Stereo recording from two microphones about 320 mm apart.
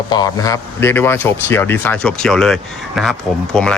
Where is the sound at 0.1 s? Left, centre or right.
Centre.